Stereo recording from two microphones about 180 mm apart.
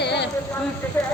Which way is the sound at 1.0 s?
10° left (ahead or behind).